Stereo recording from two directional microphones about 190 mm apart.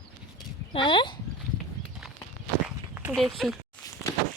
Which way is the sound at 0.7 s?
25° left (ahead or behind).